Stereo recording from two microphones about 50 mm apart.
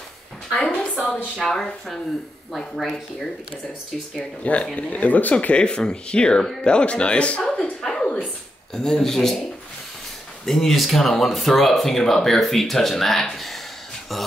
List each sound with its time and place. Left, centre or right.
0.9 s speech: centre
4.2 s speech: left
5.4 s speech: left
7.8 s a sound: centre
8.7 s speech: centre
10.4 s speech: centre